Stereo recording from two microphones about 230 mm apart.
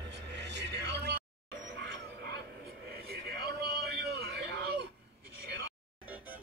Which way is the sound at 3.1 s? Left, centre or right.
Right.